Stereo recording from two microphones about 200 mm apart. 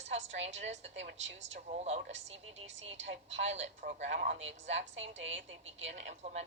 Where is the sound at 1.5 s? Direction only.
35° right (ahead or behind).